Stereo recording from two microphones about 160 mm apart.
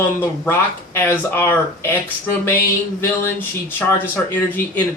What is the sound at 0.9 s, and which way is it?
Speech, 15° left (ahead or behind).